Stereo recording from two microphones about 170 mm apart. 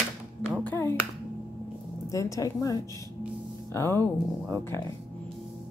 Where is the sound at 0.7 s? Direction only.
10° left (ahead or behind).